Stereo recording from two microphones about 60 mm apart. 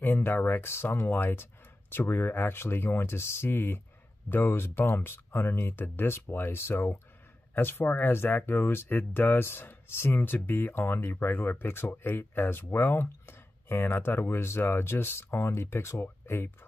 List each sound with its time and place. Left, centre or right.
0.0 s speech: left